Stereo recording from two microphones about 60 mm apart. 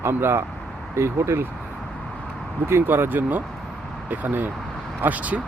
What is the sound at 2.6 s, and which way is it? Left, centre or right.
Speech, right.